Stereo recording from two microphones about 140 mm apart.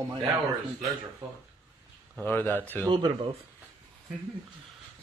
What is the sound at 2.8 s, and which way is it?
Speech, 35° right (ahead or behind).